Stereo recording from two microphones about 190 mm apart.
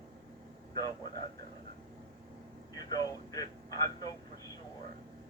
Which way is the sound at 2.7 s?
20° left (ahead or behind).